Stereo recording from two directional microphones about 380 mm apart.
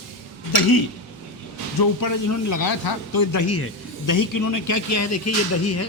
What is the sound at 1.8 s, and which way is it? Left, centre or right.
Speech, left.